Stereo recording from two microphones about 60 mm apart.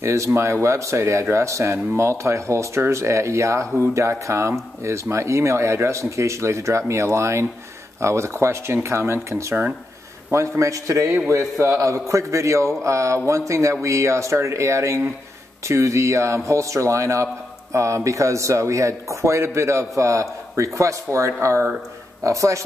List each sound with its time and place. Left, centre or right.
0.0 s a man's voice: right